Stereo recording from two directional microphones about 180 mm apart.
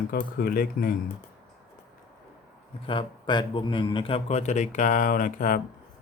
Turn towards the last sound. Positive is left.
turn(degrees=50)  # may be behind; listen again after turning